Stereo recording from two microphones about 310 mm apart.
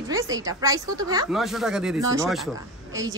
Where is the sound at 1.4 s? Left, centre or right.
Centre.